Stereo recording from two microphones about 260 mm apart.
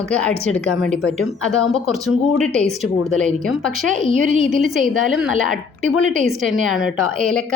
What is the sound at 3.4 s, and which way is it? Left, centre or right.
Speech, centre.